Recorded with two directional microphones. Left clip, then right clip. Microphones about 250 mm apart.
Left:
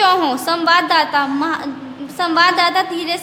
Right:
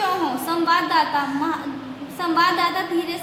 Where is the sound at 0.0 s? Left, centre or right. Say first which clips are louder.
Left 8 dB; left.